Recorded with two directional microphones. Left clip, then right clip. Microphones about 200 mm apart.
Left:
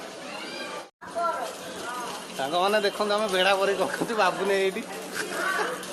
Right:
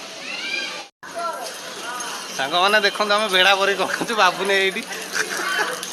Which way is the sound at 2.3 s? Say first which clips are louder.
Right 6 dB; 15° right (ahead or behind).